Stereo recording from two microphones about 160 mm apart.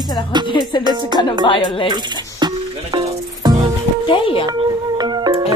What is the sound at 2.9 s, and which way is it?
Snake, 25° right (ahead or behind).